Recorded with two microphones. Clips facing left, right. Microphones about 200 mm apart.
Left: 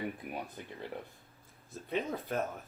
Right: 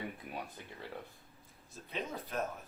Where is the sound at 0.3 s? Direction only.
15° left (ahead or behind).